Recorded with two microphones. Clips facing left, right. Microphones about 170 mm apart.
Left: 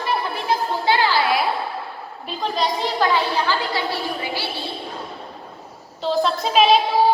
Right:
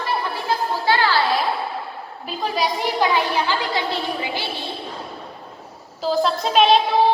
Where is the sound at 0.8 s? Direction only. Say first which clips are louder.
Even; 15° left (ahead or behind).